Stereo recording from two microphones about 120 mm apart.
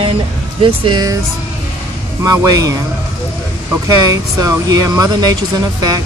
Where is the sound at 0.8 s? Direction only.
40° right (ahead or behind).